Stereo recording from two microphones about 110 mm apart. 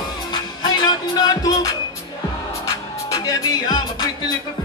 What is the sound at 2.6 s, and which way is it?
Music, 35° left (ahead or behind).